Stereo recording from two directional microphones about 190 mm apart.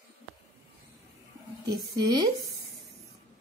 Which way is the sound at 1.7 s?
20° right (ahead or behind).